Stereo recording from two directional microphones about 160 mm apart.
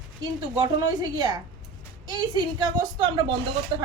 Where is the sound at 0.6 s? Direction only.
25° right (ahead or behind).